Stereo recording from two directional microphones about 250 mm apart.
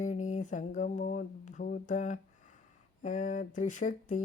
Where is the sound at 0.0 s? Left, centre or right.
Left.